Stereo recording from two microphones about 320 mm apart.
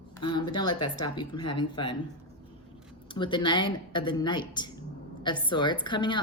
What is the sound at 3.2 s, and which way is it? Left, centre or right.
Speech, centre.